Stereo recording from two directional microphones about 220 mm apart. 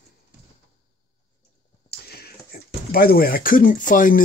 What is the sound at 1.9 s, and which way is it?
Speech, 45° left (ahead or behind).